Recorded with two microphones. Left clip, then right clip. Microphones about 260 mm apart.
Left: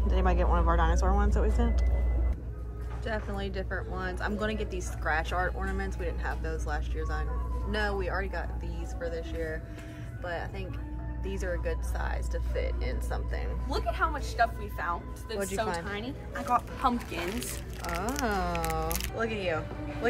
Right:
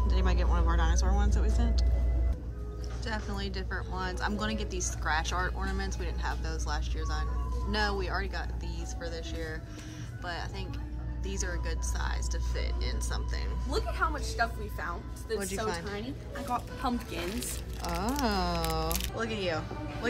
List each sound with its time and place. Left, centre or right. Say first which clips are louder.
0.1 s a woman's voice: left 7 dB; centre
3.1 s a woman's voice: left 2 dB; centre
13.7 s speech: left 1 dB; left
15.9 s a woman's voice: left 2 dB; centre
16.8 s speech: left 4 dB; centre